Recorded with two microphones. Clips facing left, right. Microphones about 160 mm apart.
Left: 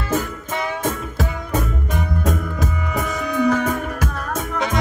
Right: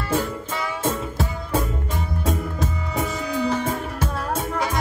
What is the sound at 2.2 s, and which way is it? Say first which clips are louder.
Music: left 2 dB; 30° right (ahead or behind).